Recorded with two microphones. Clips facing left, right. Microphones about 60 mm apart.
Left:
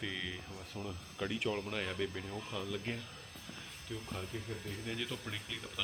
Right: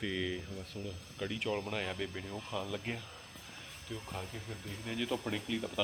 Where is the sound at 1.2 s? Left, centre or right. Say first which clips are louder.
Even; centre.